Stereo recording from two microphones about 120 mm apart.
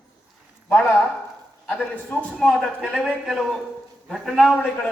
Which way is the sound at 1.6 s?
5° left (ahead or behind).